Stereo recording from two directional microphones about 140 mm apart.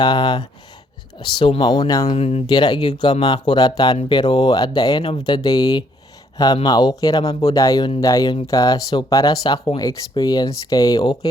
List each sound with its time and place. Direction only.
0.0 s speech: 30° left (ahead or behind)
2.0 s speech: 45° left (ahead or behind)
2.5 s speech: 30° left (ahead or behind)